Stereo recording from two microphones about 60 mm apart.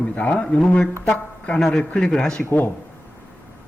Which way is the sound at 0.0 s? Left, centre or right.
Left.